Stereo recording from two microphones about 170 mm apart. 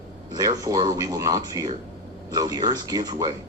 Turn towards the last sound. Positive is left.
turn(degrees=-25)  # may be behind; listen again after turning